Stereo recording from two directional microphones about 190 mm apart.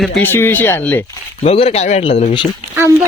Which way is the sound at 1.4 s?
30° left (ahead or behind).